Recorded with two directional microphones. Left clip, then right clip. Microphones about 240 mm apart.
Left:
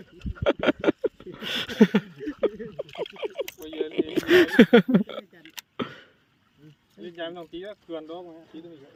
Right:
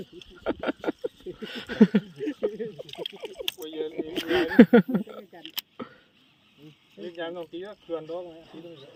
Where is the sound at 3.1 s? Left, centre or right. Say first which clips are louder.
Left 6 dB; left.